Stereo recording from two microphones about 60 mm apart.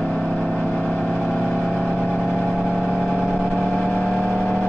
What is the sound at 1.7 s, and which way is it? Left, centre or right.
Vehicle, centre.